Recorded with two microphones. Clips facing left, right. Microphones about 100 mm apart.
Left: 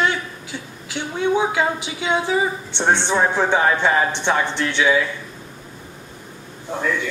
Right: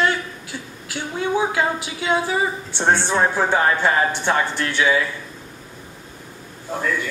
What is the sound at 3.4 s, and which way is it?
Speech, 10° right (ahead or behind).